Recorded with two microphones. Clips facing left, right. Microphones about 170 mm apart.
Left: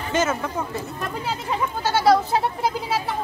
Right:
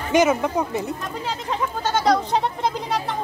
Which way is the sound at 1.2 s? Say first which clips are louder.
Right 1 dB; 10° left (ahead or behind).